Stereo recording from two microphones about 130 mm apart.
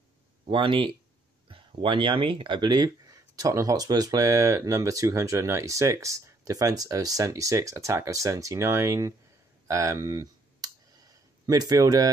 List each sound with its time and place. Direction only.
0.5 s speech: 40° right (ahead or behind); by 9.1 s 25° right (ahead or behind)
9.7 s clicking: 25° right (ahead or behind)